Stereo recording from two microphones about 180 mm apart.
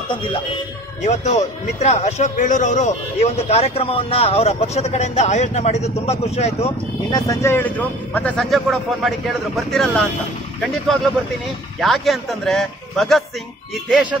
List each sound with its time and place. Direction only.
0.1 s speech: 25° left (ahead or behind)
1.0 s speech: 40° left (ahead or behind)
7.1 s speech: 20° left (ahead or behind); by 13.2 s centre (ahead or behind)